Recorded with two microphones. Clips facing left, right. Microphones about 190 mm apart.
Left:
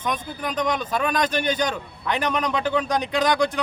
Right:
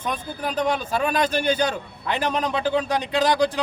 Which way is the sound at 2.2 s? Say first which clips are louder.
Right 1 dB; 30° right (ahead or behind).